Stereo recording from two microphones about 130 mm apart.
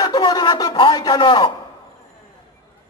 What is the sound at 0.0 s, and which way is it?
Speech, 30° left (ahead or behind).